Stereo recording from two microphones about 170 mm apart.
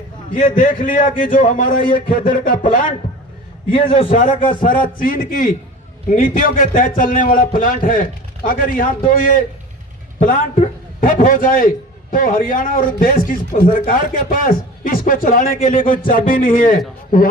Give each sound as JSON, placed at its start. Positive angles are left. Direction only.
{"t": 0.3, "sound": "speech", "side_deg": 50}
{"t": 3.7, "sound": "a man's voice", "side_deg": 30}
{"t": 4.1, "sound": "speech", "side_deg": 50}